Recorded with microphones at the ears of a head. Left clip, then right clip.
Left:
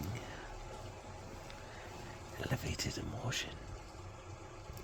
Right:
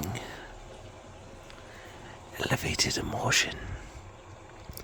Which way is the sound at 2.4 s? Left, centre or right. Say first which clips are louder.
Right 12 dB; right.